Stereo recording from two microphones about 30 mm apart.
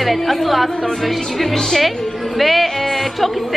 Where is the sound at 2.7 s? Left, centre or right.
Centre.